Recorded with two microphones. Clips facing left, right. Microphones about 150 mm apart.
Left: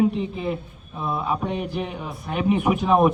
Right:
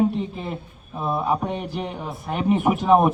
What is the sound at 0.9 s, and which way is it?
A man's voice, 25° right (ahead or behind).